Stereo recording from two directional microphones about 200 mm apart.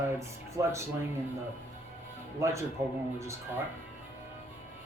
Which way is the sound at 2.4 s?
15° right (ahead or behind).